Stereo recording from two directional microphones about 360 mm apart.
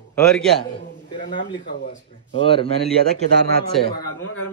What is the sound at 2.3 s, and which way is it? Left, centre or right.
Speech, centre.